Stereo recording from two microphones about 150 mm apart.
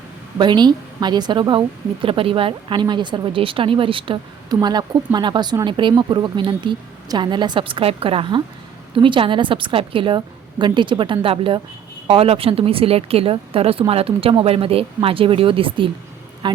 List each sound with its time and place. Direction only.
0.3 s a woman's voice: 30° right (ahead or behind)